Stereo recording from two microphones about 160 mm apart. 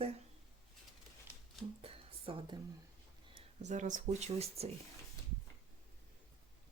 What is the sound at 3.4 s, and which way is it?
Speech, 45° right (ahead or behind).